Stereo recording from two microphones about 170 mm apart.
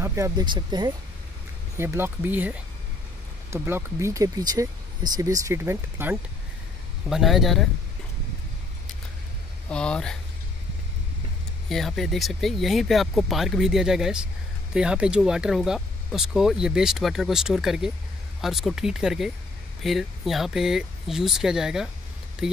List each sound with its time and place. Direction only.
0.0 s speech: 15° right (ahead or behind)
1.8 s speech: 15° right (ahead or behind)
7.1 s speech: centre (ahead or behind)
9.7 s speech: 5° left (ahead or behind)
11.7 s speech: centre (ahead or behind)